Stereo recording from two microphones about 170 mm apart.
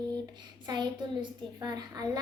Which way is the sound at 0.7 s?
25° right (ahead or behind).